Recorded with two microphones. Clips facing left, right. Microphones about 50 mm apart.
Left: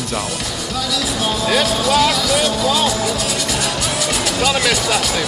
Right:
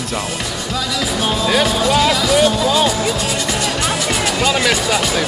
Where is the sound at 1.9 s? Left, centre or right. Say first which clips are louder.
Even; centre.